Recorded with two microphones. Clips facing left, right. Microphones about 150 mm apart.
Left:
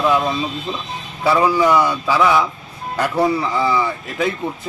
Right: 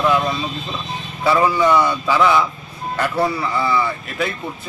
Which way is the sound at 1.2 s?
10° left (ahead or behind).